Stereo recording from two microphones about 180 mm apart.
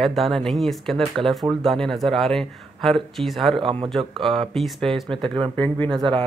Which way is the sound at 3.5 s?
30° right (ahead or behind).